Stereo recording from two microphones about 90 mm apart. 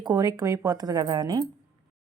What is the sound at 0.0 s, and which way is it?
Speech, 50° right (ahead or behind).